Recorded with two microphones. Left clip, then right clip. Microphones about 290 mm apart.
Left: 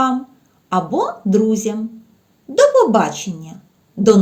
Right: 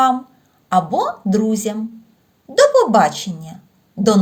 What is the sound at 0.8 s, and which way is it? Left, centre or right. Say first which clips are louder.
Speech: right 1 dB; right.